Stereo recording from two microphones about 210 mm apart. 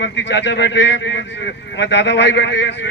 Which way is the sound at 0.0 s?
55° left (ahead or behind).